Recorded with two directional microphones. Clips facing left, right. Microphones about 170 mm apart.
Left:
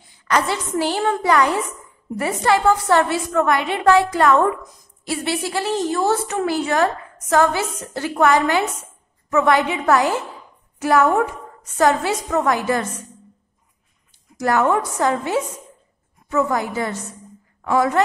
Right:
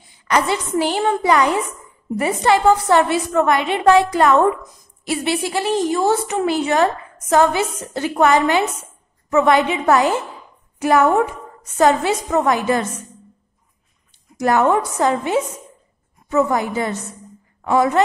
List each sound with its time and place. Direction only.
0.3 s a woman's voice: 15° right (ahead or behind)
14.4 s a woman's voice: 20° right (ahead or behind)